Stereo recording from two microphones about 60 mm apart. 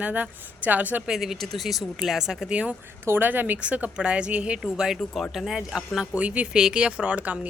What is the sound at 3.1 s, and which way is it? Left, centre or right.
Speech, right.